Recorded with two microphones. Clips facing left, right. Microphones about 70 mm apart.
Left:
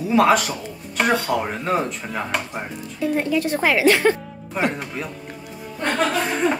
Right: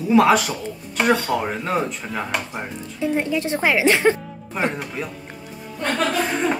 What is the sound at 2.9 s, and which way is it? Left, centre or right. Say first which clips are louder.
A woman's voice: left 1 dB; right.